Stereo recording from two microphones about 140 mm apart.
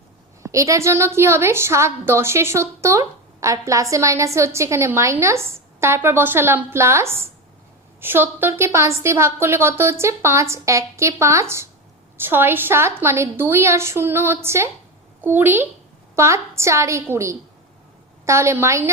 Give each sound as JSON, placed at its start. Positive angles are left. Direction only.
{"t": 0.4, "sound": "a woman's voice", "side_deg": -20}